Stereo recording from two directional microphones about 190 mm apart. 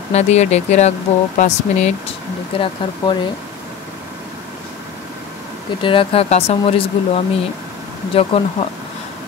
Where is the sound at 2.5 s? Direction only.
25° left (ahead or behind).